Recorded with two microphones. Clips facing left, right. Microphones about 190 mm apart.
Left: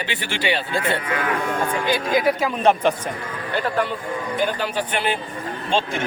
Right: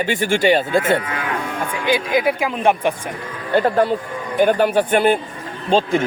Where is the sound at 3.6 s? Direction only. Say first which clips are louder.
Right 5 dB; 40° right (ahead or behind).